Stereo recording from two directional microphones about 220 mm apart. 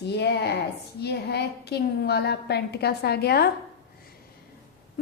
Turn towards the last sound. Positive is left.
turn(degrees=45)  # may be behind; listen again after turning